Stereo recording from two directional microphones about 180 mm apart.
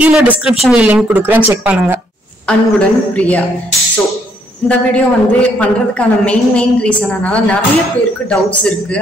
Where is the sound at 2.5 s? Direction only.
5° left (ahead or behind).